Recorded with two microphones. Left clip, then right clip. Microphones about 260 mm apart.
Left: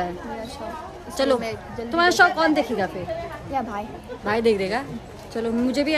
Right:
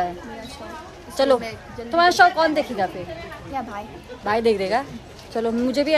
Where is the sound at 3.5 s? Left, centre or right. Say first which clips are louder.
Left 3 dB; centre.